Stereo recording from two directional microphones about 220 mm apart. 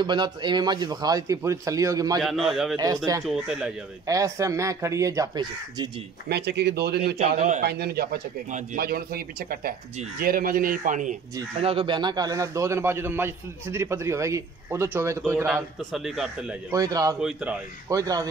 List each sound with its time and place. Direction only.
0.0 s a man's voice: 20° right (ahead or behind)
2.2 s speech: centre (ahead or behind)
4.1 s a man's voice: 15° right (ahead or behind)
6.2 s speech: 50° right (ahead or behind)
7.2 s speech: 30° right (ahead or behind)
7.6 s speech: 45° right (ahead or behind)
11.3 s a man's voice: 25° right (ahead or behind); by 16.5 s 5° right (ahead or behind)
16.7 s a man's voice: 15° right (ahead or behind)
17.2 s speech: 5° right (ahead or behind)
17.8 s a man's voice: 15° right (ahead or behind)